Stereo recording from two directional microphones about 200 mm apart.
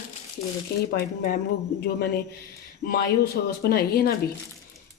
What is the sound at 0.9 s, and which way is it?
Speech, 50° left (ahead or behind).